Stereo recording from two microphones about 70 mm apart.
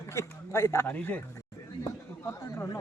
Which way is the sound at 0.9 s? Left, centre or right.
Left.